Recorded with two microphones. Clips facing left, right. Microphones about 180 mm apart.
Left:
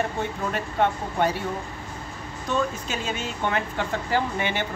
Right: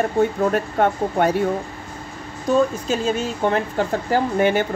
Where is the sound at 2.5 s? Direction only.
35° right (ahead or behind).